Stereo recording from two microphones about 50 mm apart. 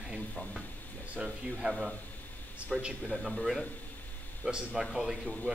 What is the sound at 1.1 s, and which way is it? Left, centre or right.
Speech, centre.